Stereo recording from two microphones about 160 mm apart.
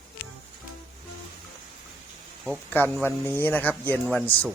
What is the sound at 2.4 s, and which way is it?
Speech, 10° left (ahead or behind).